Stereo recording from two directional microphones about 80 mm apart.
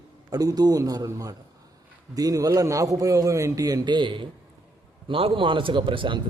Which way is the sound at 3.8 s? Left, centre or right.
Right.